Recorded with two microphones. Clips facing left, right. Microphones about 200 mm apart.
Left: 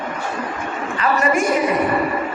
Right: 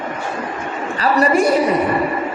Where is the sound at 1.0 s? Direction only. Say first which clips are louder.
Right 4 dB; 35° right (ahead or behind).